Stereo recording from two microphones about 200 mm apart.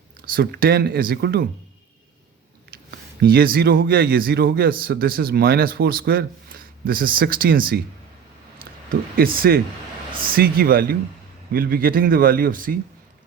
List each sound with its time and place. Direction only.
0.3 s a man's voice: 50° right (ahead or behind)
2.9 s a man's voice: 50° right (ahead or behind)
8.9 s a man's voice: 45° right (ahead or behind)